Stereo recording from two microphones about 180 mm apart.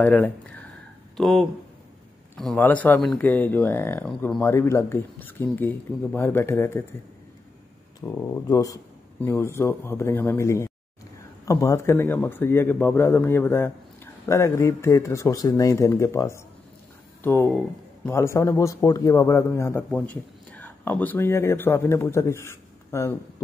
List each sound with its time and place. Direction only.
0.0 s speech: 10° left (ahead or behind)
8.0 s speech: 20° left (ahead or behind)